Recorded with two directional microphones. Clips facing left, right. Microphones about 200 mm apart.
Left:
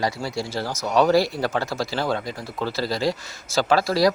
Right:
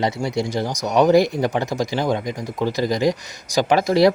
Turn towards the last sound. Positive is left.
turn(degrees=-20)  # may be behind; listen again after turning